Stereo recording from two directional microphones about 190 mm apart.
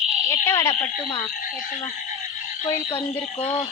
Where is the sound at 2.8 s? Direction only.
30° left (ahead or behind).